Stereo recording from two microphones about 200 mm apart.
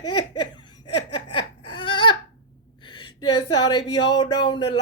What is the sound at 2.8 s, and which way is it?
Speech, 20° left (ahead or behind).